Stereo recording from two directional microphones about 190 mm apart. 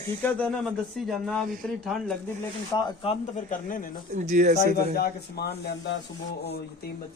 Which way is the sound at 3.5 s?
45° left (ahead or behind).